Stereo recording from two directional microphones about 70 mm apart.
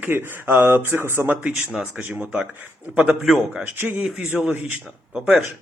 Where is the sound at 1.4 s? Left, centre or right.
Centre.